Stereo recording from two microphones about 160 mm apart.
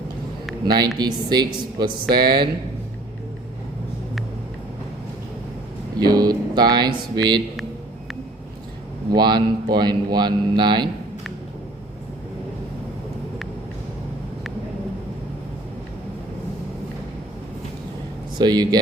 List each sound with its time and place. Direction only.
0.6 s a man's voice: 25° right (ahead or behind)
6.0 s speech: 25° right (ahead or behind)
9.1 s a man's voice: 25° right (ahead or behind)
18.3 s a man's voice: 25° right (ahead or behind)